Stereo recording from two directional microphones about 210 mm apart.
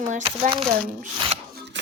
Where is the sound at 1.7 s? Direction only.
60° right (ahead or behind).